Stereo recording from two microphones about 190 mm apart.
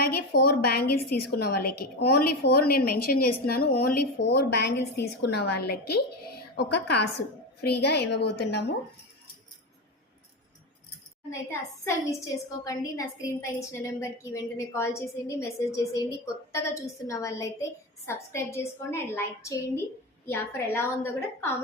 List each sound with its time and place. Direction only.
0.0 s a woman's voice: 55° left (ahead or behind)
12.6 s a woman's voice: 20° left (ahead or behind)